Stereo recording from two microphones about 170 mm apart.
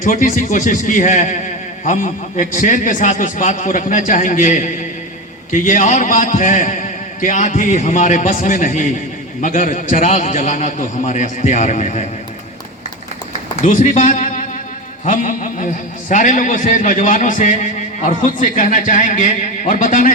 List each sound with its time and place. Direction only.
0.0 s a man's voice: 55° left (ahead or behind)
13.6 s a man's voice: 45° left (ahead or behind)